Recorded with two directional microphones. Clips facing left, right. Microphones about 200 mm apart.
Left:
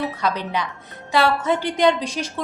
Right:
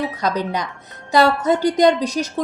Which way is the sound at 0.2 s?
40° right (ahead or behind).